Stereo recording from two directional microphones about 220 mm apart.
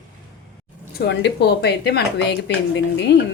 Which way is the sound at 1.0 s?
50° left (ahead or behind).